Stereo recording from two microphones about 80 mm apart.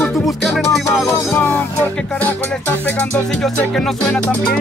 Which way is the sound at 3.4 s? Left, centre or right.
Centre.